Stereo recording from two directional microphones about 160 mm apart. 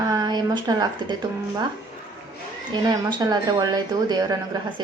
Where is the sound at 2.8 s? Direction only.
25° right (ahead or behind).